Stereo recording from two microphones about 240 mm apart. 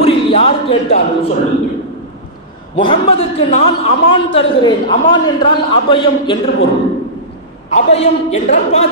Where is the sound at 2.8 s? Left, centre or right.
Left.